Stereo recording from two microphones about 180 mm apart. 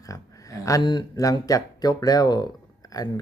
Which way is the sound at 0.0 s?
20° left (ahead or behind).